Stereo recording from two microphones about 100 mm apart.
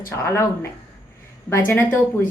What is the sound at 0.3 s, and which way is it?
A woman's voice, 30° left (ahead or behind).